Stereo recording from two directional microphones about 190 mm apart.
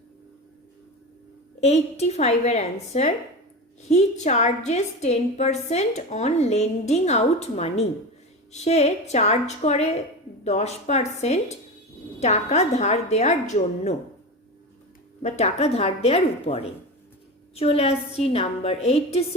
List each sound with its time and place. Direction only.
1.6 s a woman's voice: 35° left (ahead or behind)
15.2 s a woman's voice: 35° left (ahead or behind)